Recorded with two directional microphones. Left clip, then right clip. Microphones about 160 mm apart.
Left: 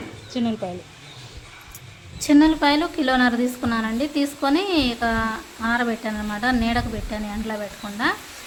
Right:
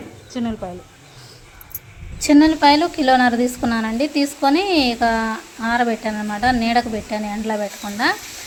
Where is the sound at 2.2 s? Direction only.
20° right (ahead or behind).